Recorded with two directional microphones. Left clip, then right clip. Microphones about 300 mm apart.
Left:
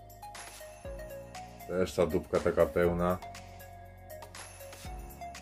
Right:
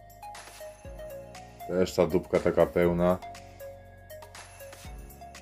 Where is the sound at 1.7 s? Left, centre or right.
Centre.